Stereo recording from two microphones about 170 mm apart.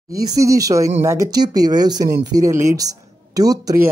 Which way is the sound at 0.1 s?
20° right (ahead or behind).